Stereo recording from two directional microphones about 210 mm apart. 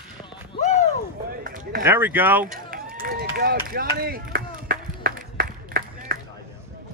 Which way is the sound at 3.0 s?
45° right (ahead or behind).